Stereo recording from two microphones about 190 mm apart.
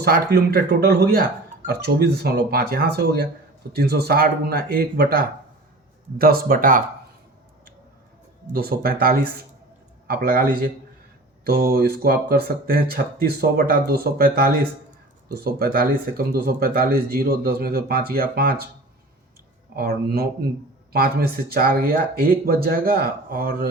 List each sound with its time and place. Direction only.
0.0 s speech: 55° right (ahead or behind)
8.5 s speech: 55° right (ahead or behind)
19.7 s speech: 55° right (ahead or behind)